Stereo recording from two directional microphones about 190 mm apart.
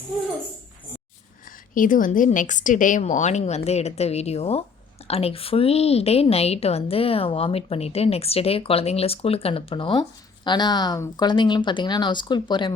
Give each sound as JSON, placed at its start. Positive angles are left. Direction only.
{"t": 1.7, "sound": "a woman's voice", "side_deg": 45}